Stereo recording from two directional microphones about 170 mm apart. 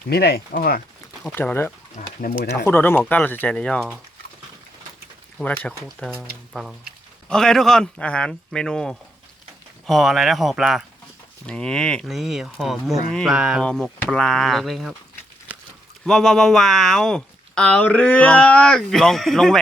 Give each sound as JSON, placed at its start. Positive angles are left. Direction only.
{"t": 0.1, "sound": "speech", "side_deg": 65}
{"t": 1.2, "sound": "speech", "side_deg": 10}
{"t": 2.0, "sound": "speech", "side_deg": 45}
{"t": 2.6, "sound": "speech", "side_deg": 10}
{"t": 5.4, "sound": "speech", "side_deg": 0}
{"t": 6.0, "sound": "speech", "side_deg": 10}
{"t": 6.5, "sound": "speech", "side_deg": 0}
{"t": 16.0, "sound": "speech", "side_deg": 0}